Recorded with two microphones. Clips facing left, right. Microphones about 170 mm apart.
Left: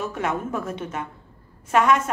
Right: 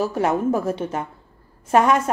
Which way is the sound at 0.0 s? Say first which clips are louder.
Right 6 dB; 35° right (ahead or behind).